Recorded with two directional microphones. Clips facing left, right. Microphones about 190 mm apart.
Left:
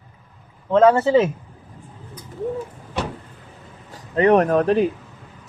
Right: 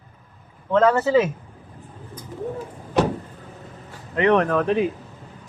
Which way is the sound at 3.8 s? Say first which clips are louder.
Left 3 dB; 40° left (ahead or behind).